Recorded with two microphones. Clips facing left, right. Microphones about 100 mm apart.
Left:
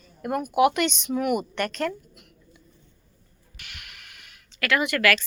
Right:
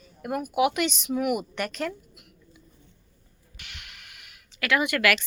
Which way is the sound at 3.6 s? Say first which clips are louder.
Left 1 dB; 20° right (ahead or behind).